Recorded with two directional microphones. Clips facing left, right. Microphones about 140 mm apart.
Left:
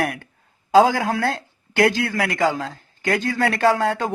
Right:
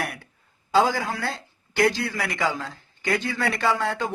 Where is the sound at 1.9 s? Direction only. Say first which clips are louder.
Left 4 dB; 55° left (ahead or behind).